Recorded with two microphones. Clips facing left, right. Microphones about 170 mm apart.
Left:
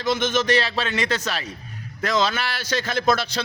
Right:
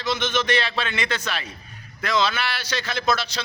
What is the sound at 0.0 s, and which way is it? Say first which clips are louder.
A man's voice: left 3 dB; 45° left (ahead or behind).